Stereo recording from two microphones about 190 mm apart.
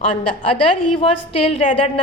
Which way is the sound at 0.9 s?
30° left (ahead or behind).